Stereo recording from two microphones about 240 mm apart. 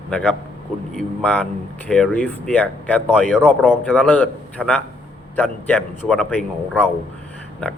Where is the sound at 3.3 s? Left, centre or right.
Centre.